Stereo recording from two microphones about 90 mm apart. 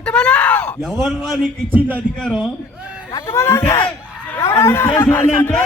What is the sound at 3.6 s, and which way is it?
Speech, 45° left (ahead or behind).